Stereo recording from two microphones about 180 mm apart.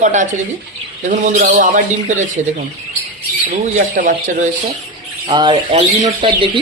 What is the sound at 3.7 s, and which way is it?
Speech, 45° right (ahead or behind).